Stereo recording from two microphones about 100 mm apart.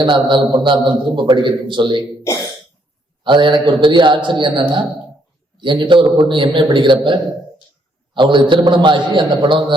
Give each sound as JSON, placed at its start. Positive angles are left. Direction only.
{"t": 0.0, "sound": "a man's voice", "side_deg": -55}
{"t": 2.2, "sound": "speech", "side_deg": 30}
{"t": 3.2, "sound": "a man's voice", "side_deg": -50}